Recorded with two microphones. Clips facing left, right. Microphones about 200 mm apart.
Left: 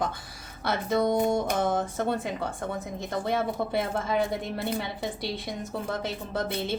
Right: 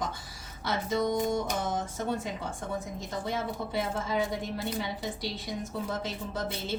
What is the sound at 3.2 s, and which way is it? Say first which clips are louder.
A woman's voice: left 5 dB; 60° left (ahead or behind).